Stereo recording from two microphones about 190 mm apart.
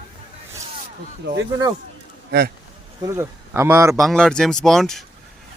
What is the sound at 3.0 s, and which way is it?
Speech, 15° right (ahead or behind).